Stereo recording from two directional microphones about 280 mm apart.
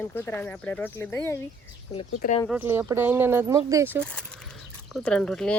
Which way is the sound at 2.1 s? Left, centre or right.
Left.